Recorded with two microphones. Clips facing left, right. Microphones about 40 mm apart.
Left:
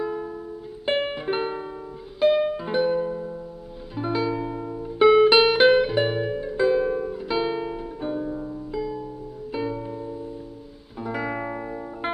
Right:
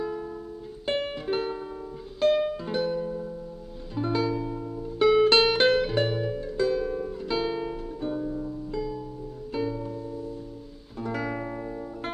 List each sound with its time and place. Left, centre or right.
0.0 s music: centre